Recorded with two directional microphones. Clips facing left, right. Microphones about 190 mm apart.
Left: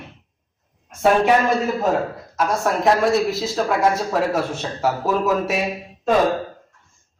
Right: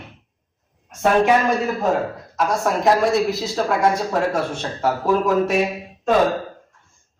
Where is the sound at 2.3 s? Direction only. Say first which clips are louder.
Even; centre (ahead or behind).